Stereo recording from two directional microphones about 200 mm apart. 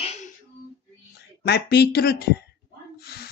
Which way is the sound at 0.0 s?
35° left (ahead or behind).